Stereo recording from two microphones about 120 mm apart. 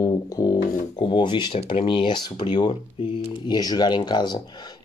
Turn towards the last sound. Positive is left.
turn(degrees=35)  # may be behind; listen again after turning